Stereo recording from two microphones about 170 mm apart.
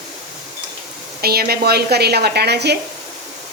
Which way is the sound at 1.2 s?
65° right (ahead or behind).